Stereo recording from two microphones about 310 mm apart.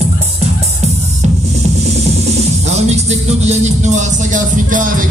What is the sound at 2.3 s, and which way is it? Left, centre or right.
Speech, right.